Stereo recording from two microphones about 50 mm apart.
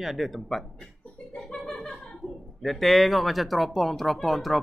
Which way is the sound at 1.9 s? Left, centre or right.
Centre.